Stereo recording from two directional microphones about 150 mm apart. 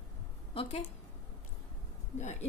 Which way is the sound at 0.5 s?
45° left (ahead or behind).